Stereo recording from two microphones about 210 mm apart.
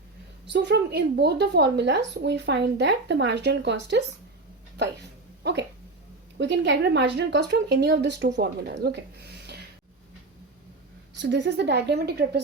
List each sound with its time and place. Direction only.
0.4 s speech: 55° right (ahead or behind)
5.4 s speech: 55° right (ahead or behind)
11.2 s a woman's voice: 55° right (ahead or behind)